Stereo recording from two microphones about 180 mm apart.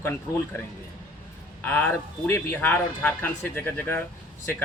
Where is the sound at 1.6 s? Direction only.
10° left (ahead or behind).